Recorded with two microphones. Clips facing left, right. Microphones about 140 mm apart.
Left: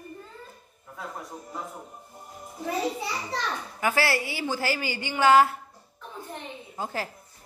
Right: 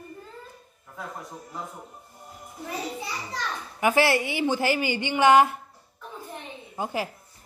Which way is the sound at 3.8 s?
20° right (ahead or behind).